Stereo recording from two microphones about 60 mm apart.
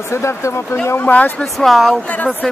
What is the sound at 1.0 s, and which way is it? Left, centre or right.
Speech, left.